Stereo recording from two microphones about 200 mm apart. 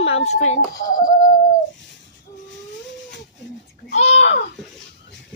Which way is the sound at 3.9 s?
35° left (ahead or behind).